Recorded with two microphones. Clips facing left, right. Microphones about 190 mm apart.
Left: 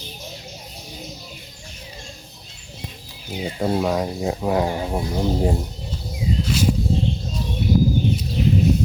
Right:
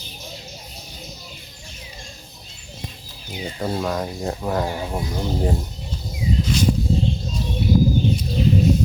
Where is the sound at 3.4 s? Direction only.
10° left (ahead or behind).